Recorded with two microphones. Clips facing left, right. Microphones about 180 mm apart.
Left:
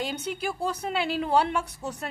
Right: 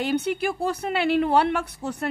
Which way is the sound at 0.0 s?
60° right (ahead or behind).